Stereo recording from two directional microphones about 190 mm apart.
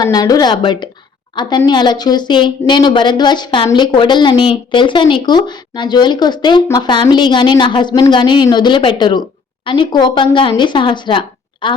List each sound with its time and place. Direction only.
0.0 s a woman's voice: 20° left (ahead or behind)